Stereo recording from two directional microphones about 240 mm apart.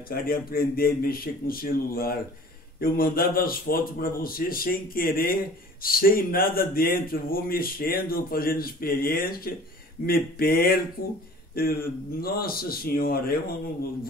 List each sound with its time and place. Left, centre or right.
0.1 s a man's voice: left